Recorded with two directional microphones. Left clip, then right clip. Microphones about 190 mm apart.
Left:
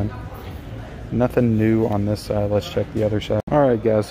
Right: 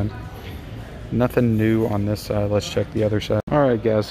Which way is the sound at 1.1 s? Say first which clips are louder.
Left 1 dB; centre (ahead or behind).